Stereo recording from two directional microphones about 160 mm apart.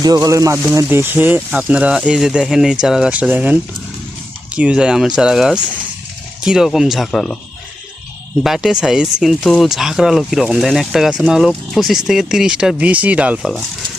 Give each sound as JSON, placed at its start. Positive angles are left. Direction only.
{"t": 0.0, "sound": "speech", "side_deg": -20}
{"t": 8.4, "sound": "speech", "side_deg": 0}